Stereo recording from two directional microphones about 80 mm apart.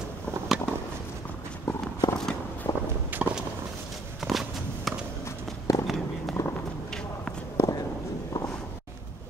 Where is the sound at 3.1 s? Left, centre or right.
Right.